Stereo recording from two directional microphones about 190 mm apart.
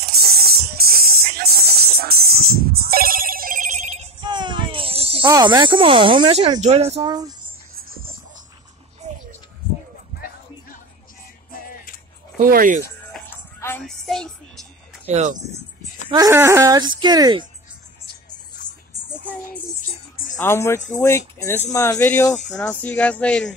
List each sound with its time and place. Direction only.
0.2 s music: 55° right (ahead or behind)
2.8 s telephone bell ringing: 50° right (ahead or behind); by 5.3 s 30° right (ahead or behind)
5.3 s speech: 25° right (ahead or behind)
7.0 s speech: 20° right (ahead or behind)
9.0 s a sound: 35° right (ahead or behind)
11.5 s music: 50° left (ahead or behind)
12.4 s speech: 45° right (ahead or behind)
13.6 s music: 10° left (ahead or behind)
13.8 s music: centre (ahead or behind)
15.0 s speech: 35° right (ahead or behind)
16.1 s speech: 15° right (ahead or behind)
19.0 s a sound: 10° left (ahead or behind)
20.4 s speech: 15° left (ahead or behind)